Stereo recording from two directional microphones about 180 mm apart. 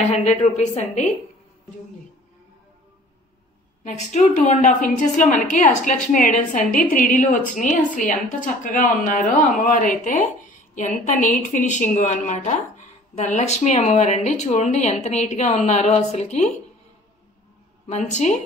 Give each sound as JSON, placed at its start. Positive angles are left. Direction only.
{"t": 0.0, "sound": "a woman's voice", "side_deg": 35}
{"t": 3.8, "sound": "a woman's voice", "side_deg": 40}
{"t": 17.8, "sound": "a woman's voice", "side_deg": 40}